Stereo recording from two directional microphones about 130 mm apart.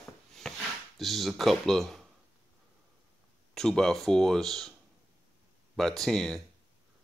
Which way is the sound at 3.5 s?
5° left (ahead or behind).